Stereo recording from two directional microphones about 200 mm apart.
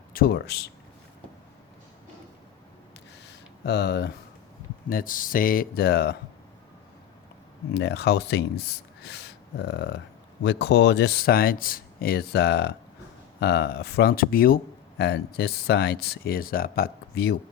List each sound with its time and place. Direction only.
0.1 s speech: 50° left (ahead or behind)
3.2 s a sound: 55° left (ahead or behind)
4.9 s speech: 45° left (ahead or behind)
7.7 s speech: 55° left (ahead or behind)